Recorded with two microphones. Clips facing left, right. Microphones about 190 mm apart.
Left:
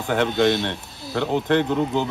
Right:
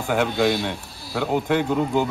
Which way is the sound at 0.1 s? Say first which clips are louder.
Left 1 dB; 5° right (ahead or behind).